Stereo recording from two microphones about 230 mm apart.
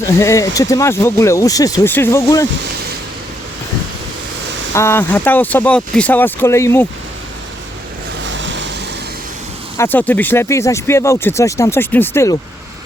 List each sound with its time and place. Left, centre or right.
0.2 s speech: centre
4.7 s speech: centre
8.2 s vehicle: right
9.7 s speech: centre